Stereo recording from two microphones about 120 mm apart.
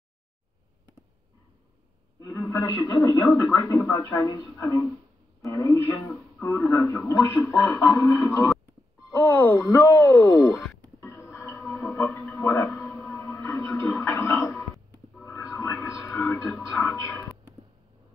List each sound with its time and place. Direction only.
2.1 s a sound: 30° left (ahead or behind)
2.5 s a man's voice: 25° left (ahead or behind)
9.1 s speech: 15° left (ahead or behind)
11.3 s music: 20° left (ahead or behind)
13.1 s television: 20° left (ahead or behind)